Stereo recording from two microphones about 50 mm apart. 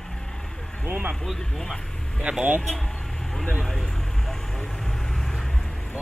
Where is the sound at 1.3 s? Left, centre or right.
Centre.